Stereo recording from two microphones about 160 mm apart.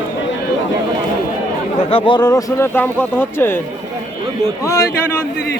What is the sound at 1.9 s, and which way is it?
Speech, 30° left (ahead or behind).